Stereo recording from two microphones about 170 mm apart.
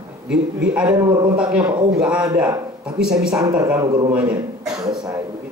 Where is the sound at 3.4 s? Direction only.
20° right (ahead or behind).